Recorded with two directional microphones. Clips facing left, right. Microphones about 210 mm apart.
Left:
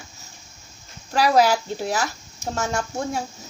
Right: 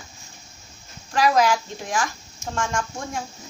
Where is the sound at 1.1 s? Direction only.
35° left (ahead or behind).